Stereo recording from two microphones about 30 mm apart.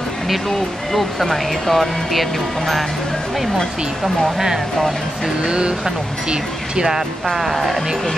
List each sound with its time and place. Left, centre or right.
0.9 s speech: centre
5.4 s speech: right
7.2 s speech: centre